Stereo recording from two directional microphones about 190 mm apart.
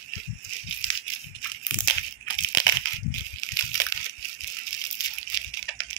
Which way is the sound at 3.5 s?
20° left (ahead or behind).